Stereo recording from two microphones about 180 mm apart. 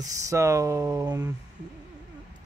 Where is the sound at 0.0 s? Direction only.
15° right (ahead or behind).